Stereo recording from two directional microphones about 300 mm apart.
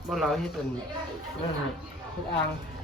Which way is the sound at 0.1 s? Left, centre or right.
Centre.